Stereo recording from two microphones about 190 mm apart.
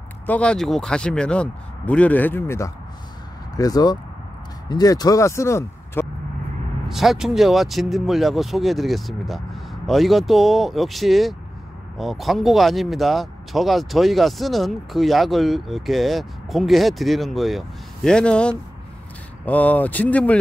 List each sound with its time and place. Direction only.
0.3 s speech: 5° left (ahead or behind)
6.9 s speech: centre (ahead or behind)